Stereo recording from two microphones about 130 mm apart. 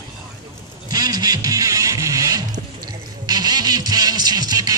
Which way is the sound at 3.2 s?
30° right (ahead or behind).